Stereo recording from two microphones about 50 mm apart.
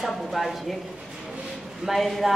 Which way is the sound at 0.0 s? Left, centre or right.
Centre.